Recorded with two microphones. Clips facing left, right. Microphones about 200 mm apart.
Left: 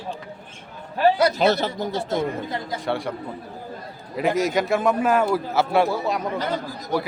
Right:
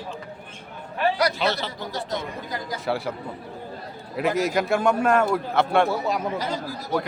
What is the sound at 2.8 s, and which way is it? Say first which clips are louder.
Speech: even; 5° right (ahead or behind).